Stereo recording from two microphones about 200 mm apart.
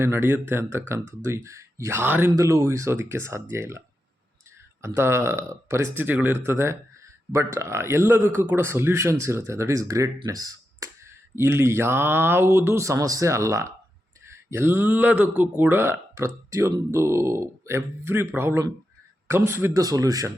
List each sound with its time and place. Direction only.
0.0 s speech: 10° right (ahead or behind)